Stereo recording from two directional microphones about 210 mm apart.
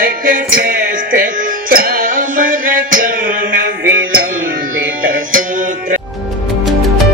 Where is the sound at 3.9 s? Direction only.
45° right (ahead or behind).